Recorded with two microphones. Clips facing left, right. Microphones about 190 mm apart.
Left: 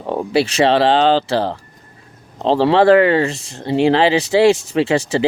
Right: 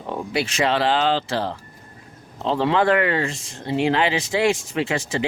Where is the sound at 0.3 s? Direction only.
30° left (ahead or behind).